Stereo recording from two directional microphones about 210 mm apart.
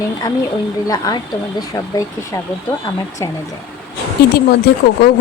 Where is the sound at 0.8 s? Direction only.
15° left (ahead or behind).